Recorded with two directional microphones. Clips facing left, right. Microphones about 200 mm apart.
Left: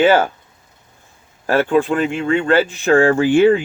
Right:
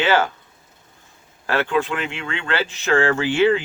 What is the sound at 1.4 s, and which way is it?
Speech, 45° left (ahead or behind).